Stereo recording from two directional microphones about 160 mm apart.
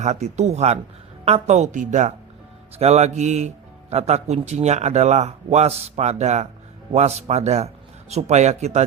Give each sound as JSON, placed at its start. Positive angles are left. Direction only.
{"t": 0.0, "sound": "speech", "side_deg": -45}